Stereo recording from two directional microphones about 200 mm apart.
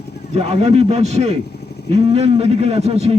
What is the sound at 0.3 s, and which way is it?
A man's voice, 30° right (ahead or behind).